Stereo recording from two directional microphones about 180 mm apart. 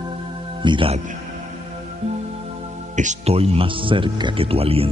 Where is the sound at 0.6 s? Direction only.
25° right (ahead or behind).